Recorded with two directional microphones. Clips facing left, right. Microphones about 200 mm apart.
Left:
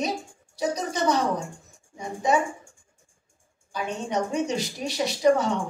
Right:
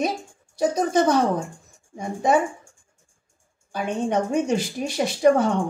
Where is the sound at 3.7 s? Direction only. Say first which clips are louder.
Right 5 dB; 55° right (ahead or behind).